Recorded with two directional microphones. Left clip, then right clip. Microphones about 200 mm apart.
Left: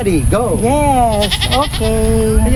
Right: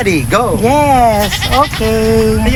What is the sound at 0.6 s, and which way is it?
Speech, 25° right (ahead or behind).